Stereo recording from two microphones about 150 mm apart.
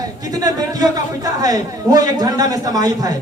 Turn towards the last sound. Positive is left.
turn(degrees=-25)  # may be behind; listen again after turning